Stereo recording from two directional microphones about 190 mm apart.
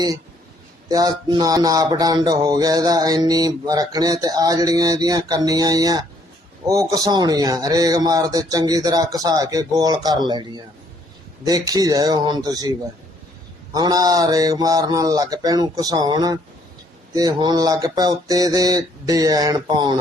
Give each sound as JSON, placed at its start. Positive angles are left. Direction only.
{"t": 0.9, "sound": "speech", "side_deg": -20}
{"t": 13.7, "sound": "speech", "side_deg": -20}